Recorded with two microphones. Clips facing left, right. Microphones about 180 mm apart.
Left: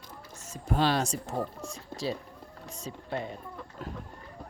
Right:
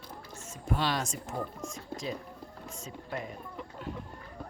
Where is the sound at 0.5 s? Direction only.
35° left (ahead or behind).